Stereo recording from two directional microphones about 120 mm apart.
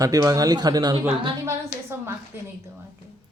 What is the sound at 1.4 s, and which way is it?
Speech, 20° right (ahead or behind).